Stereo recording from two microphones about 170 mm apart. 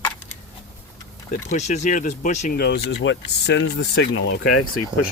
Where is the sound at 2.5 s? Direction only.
70° left (ahead or behind); by 4.5 s 90° left.